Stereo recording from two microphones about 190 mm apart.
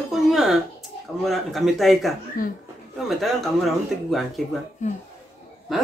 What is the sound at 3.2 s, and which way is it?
Speech, centre (ahead or behind).